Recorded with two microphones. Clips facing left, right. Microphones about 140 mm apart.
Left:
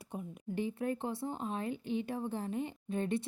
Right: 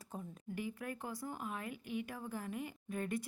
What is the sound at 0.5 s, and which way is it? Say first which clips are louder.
Speech: left 8 dB; 30° left (ahead or behind).